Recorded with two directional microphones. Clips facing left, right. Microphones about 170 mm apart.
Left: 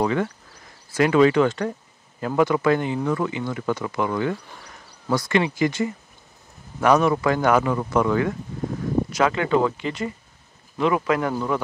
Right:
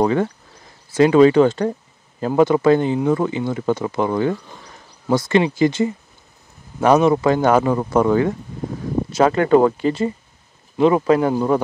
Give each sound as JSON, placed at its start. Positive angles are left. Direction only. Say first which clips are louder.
{"t": 0.0, "sound": "speech", "louder": "right 5 dB", "side_deg": -35}
{"t": 10.8, "sound": "speech", "louder": "right 6 dB", "side_deg": -30}